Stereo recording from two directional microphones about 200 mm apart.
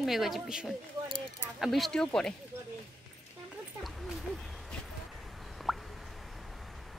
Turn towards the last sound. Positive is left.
turn(degrees=0)  # may be behind; listen again after turning